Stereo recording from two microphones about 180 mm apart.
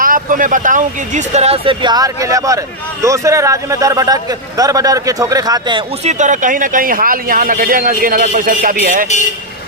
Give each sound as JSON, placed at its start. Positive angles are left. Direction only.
{"t": 0.0, "sound": "speech", "side_deg": -50}
{"t": 6.1, "sound": "speech", "side_deg": -45}